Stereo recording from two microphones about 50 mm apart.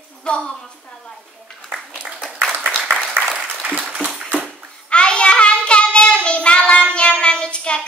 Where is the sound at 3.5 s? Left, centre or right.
Centre.